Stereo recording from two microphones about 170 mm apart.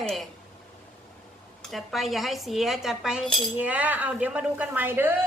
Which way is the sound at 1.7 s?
Centre (ahead or behind).